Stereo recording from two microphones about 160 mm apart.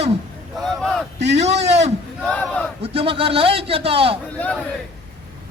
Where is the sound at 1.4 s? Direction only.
45° right (ahead or behind).